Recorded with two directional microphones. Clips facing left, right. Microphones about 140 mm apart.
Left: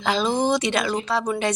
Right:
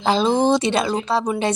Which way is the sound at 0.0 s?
30° right (ahead or behind).